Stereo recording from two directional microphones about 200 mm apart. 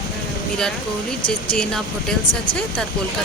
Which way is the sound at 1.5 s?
5° left (ahead or behind).